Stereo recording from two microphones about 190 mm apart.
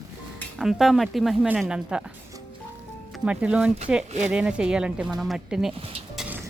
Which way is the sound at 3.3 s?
5° right (ahead or behind).